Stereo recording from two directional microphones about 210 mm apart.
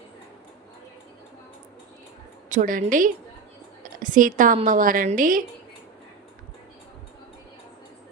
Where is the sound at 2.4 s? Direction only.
40° right (ahead or behind).